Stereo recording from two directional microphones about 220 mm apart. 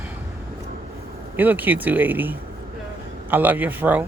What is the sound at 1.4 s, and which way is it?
A man's voice, 10° right (ahead or behind).